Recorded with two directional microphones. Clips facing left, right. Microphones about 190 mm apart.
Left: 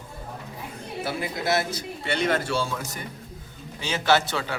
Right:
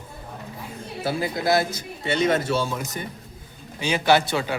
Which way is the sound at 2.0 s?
20° right (ahead or behind).